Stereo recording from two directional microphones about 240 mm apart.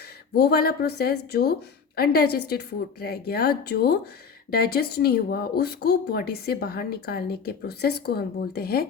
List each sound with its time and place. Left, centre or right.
0.3 s a woman's voice: left